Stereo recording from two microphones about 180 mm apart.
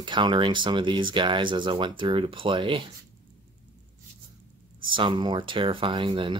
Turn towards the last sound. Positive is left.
turn(degrees=-30)  # may be behind; listen again after turning